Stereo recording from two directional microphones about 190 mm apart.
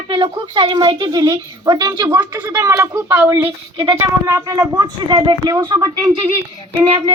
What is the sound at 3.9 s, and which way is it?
A woman's voice, 15° right (ahead or behind).